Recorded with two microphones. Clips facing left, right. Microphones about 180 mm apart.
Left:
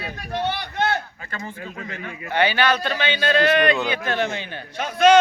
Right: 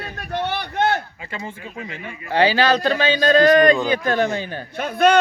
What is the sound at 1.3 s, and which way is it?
Speech, 20° right (ahead or behind).